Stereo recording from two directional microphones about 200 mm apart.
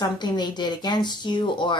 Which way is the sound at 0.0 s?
20° left (ahead or behind).